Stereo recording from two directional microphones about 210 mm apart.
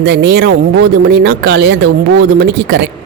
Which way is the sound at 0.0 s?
55° right (ahead or behind).